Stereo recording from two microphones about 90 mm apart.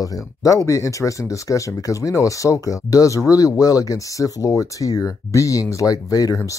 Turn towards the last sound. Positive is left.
turn(degrees=45)  # may be behind; listen again after turning